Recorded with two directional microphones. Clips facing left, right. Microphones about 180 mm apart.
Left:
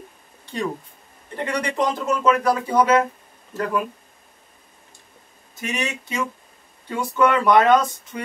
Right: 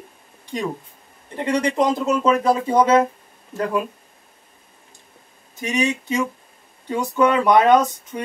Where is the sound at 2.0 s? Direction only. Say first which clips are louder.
Right 2 dB; 25° right (ahead or behind).